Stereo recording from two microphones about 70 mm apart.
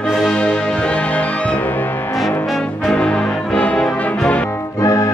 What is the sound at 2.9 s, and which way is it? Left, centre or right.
Brass instrument, centre.